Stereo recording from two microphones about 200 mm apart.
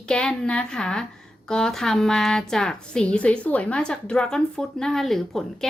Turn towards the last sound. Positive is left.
turn(degrees=0)  # may be behind; listen again after turning